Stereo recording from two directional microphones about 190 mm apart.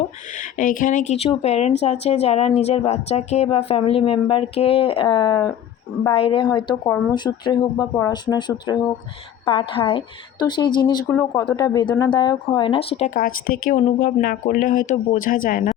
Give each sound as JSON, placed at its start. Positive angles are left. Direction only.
{"t": 0.3, "sound": "speech", "side_deg": 45}
{"t": 13.1, "sound": "speech", "side_deg": 45}